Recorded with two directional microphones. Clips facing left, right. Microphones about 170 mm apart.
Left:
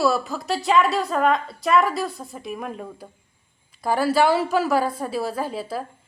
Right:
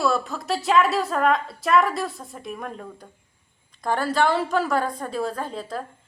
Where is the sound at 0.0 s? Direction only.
5° left (ahead or behind).